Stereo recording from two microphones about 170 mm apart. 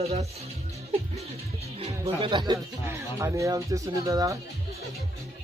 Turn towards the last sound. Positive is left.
turn(degrees=-20)  # may be behind; listen again after turning